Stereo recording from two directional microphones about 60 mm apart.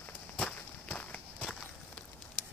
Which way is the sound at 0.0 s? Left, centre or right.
Left.